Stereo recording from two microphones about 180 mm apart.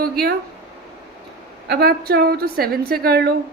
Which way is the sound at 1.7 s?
60° right (ahead or behind).